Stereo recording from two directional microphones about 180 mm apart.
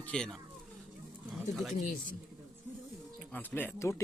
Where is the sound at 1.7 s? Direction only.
45° left (ahead or behind).